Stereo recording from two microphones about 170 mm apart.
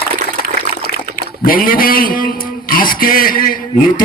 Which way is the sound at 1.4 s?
55° left (ahead or behind).